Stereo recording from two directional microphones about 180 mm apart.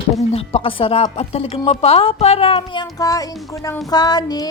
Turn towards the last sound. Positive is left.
turn(degrees=20)  # may be behind; listen again after turning